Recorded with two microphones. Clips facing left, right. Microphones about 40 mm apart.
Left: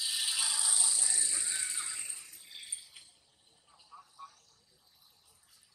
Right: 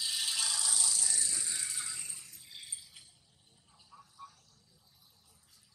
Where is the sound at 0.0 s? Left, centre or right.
Centre.